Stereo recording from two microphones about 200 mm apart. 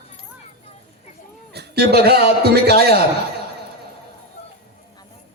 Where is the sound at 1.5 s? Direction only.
55° right (ahead or behind).